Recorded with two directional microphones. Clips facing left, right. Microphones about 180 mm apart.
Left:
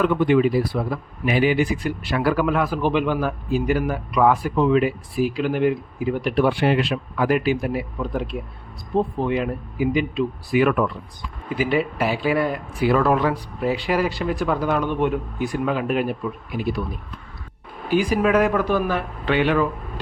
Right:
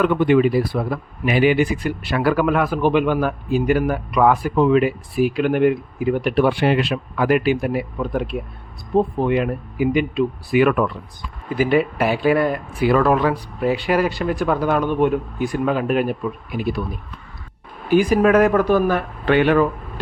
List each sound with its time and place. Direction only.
0.0 s a man's voice: 60° right (ahead or behind)
11.5 s speech: 50° right (ahead or behind)
17.9 s speech: 50° right (ahead or behind)